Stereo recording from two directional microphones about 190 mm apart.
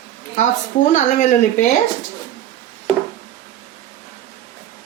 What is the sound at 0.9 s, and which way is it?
Speech, 40° left (ahead or behind).